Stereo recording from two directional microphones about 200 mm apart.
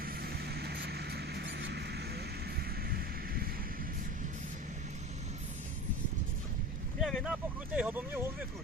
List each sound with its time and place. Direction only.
0.0 s vehicle: 50° right (ahead or behind)
7.0 s speech: centre (ahead or behind)